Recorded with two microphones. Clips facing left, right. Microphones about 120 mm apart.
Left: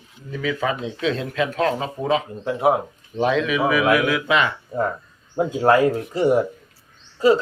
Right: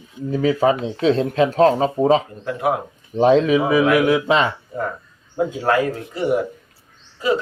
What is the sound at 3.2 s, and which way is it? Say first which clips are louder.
A man's voice: right 5 dB; 35° right (ahead or behind).